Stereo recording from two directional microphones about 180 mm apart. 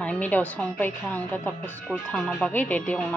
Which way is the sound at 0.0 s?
5° left (ahead or behind).